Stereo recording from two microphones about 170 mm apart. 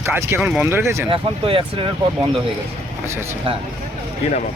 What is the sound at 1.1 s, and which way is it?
Speech, 30° right (ahead or behind).